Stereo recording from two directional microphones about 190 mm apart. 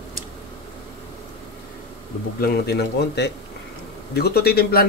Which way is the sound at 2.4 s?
55° left (ahead or behind).